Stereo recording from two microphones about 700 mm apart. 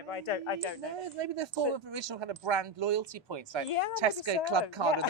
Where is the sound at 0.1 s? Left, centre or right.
Left.